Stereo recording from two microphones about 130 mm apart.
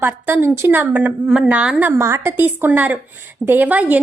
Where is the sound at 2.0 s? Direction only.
20° right (ahead or behind).